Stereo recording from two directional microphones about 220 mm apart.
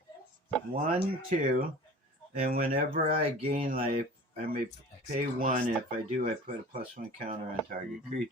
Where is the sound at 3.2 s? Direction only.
25° right (ahead or behind).